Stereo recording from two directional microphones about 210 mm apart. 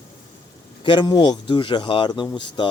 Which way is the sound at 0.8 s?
20° left (ahead or behind).